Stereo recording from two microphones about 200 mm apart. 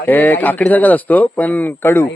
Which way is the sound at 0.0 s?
10° left (ahead or behind).